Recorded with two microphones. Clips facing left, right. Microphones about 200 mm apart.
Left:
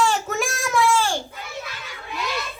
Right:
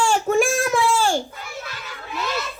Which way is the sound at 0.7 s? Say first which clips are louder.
Right 1 dB; 50° right (ahead or behind).